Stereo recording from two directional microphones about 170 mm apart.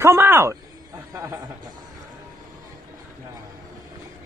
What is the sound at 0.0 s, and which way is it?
Speech, 15° right (ahead or behind).